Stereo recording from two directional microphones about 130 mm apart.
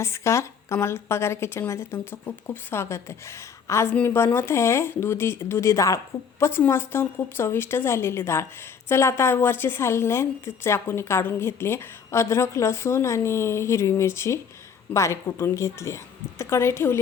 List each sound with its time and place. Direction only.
0.0 s a woman's voice: 20° left (ahead or behind)